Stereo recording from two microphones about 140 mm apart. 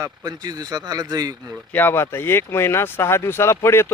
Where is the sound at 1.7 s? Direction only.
15° left (ahead or behind).